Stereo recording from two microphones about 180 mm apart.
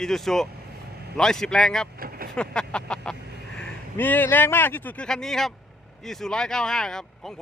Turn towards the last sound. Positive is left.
turn(degrees=5)  # may be behind; listen again after turning